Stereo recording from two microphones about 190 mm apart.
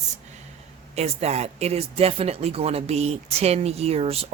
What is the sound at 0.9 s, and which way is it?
Speech, 35° right (ahead or behind).